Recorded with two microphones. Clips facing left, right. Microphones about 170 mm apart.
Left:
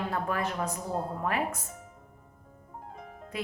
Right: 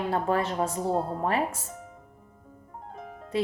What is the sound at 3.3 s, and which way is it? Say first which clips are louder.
Speech: right 8 dB; 30° right (ahead or behind).